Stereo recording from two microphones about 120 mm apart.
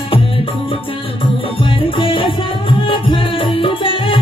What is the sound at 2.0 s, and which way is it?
Music, 45° left (ahead or behind).